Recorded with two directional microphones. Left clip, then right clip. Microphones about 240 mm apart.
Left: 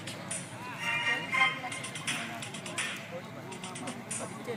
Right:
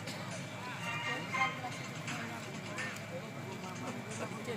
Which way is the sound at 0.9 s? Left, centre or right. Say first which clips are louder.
Left 8 dB; left.